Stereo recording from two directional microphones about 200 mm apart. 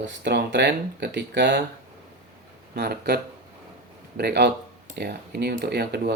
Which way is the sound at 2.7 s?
50° right (ahead or behind).